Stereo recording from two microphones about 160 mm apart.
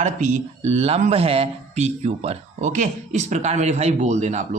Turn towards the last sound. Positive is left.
turn(degrees=-45)  # may be behind; listen again after turning